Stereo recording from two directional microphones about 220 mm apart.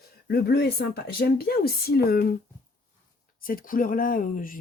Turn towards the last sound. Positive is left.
turn(degrees=40)  # may be behind; listen again after turning